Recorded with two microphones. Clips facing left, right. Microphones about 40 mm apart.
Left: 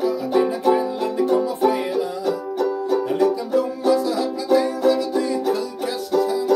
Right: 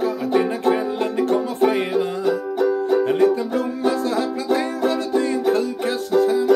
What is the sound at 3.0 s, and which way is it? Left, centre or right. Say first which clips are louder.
Music: right 2 dB; right.